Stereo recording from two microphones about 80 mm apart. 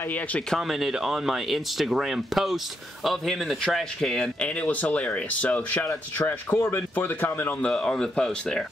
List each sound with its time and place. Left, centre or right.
0.6 s speech: centre; by 7.5 s left
7.6 s speech: centre